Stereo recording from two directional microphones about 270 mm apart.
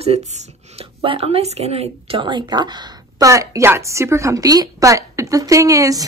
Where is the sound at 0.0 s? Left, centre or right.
Right.